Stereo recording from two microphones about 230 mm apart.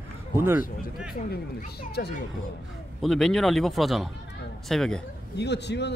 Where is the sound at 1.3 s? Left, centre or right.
Left.